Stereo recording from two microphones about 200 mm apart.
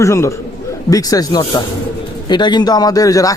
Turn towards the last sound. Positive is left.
turn(degrees=15)  # may be behind; listen again after turning